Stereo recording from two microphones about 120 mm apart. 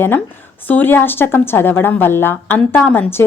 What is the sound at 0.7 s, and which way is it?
A woman's voice, 15° left (ahead or behind).